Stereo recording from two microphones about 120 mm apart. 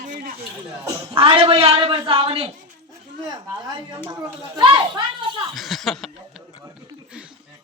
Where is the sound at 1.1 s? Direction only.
50° right (ahead or behind).